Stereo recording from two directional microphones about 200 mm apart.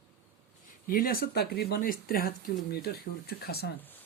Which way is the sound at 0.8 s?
45° left (ahead or behind).